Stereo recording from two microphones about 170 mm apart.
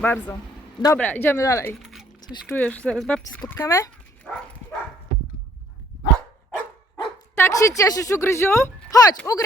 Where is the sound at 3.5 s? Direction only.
15° left (ahead or behind).